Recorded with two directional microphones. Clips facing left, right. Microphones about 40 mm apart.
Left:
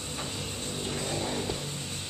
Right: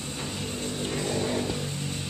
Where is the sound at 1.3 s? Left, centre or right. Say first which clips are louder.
Right 4 dB; centre.